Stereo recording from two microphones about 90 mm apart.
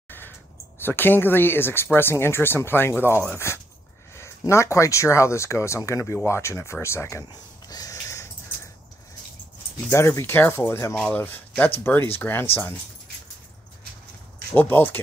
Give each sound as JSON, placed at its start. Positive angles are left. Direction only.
{"t": 0.7, "sound": "speech", "side_deg": 25}
{"t": 7.6, "sound": "a sound", "side_deg": 45}
{"t": 9.8, "sound": "speech", "side_deg": 30}
{"t": 14.5, "sound": "speech", "side_deg": 20}